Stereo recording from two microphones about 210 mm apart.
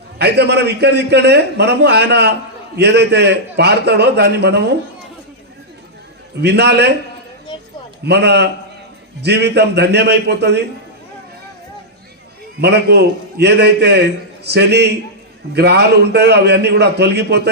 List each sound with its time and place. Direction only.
0.2 s a man's voice: 55° right (ahead or behind)
6.4 s a man's voice: 55° right (ahead or behind)
8.0 s a man's voice: 50° right (ahead or behind)
12.5 s a man's voice: 50° right (ahead or behind)